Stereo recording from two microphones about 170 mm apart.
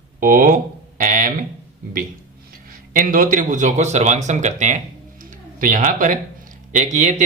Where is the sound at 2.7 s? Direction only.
55° right (ahead or behind).